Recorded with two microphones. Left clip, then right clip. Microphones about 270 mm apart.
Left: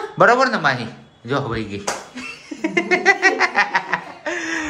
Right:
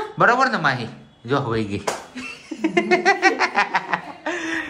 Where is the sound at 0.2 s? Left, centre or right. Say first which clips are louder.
Left 3 dB; centre.